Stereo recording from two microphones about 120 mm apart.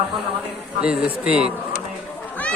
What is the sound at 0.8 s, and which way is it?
Speech, 10° right (ahead or behind).